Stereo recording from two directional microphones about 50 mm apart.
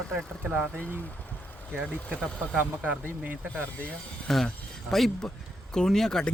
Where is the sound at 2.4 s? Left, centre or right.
Right.